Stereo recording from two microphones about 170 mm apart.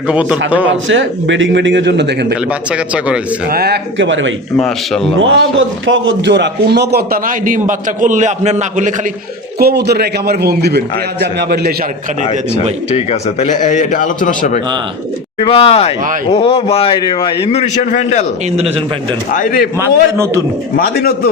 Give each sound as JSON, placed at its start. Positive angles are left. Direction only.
{"t": 0.1, "sound": "speech", "side_deg": -5}
{"t": 0.7, "sound": "a man's voice", "side_deg": -90}
{"t": 2.5, "sound": "speech", "side_deg": -5}
{"t": 3.5, "sound": "speech", "side_deg": -70}
{"t": 4.5, "sound": "speech", "side_deg": 0}
{"t": 5.2, "sound": "a man's voice", "side_deg": -90}
{"t": 9.6, "sound": "a man's voice", "side_deg": -70}
{"t": 12.9, "sound": "a man's voice", "side_deg": 40}
{"t": 15.4, "sound": "a man's voice", "side_deg": 30}
{"t": 19.3, "sound": "a man's voice", "side_deg": 55}
{"t": 19.8, "sound": "speech", "side_deg": -15}
{"t": 20.7, "sound": "a man's voice", "side_deg": 60}